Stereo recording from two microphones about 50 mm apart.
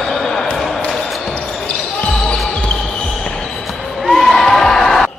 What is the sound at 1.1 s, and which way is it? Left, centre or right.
Basketball bounce, centre.